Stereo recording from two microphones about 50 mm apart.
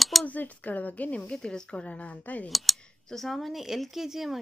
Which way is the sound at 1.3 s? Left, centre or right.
Centre.